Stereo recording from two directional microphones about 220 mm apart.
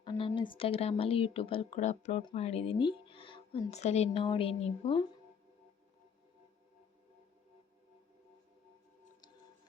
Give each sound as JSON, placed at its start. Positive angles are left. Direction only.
{"t": 0.0, "sound": "speech", "side_deg": 25}